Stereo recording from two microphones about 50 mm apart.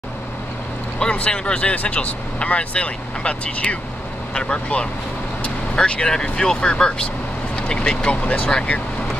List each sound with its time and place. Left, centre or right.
1.1 s speech: left